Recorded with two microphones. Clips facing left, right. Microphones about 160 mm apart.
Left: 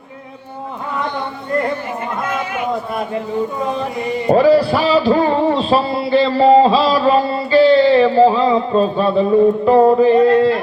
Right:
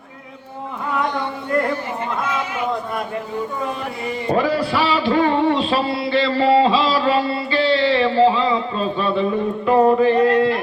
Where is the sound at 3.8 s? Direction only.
30° left (ahead or behind).